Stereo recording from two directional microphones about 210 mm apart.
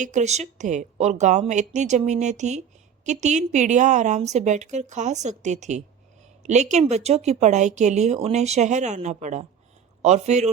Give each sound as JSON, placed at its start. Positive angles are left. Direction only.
{"t": 0.0, "sound": "speech", "side_deg": -35}